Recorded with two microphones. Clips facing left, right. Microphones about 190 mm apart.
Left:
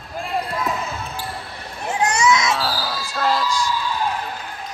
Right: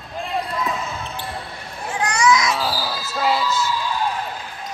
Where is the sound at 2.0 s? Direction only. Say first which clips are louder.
Even; 25° left (ahead or behind).